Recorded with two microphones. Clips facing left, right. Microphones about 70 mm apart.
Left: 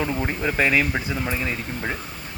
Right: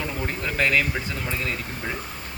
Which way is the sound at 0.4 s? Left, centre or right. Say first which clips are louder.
Left 2 dB; centre.